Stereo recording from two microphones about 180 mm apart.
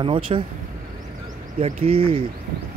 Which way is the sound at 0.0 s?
30° right (ahead or behind).